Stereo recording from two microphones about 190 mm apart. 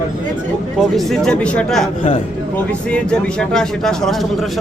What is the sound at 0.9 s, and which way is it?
Speech, centre (ahead or behind).